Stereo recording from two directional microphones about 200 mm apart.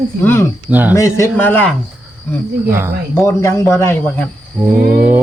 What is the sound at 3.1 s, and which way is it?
Speech, 10° left (ahead or behind).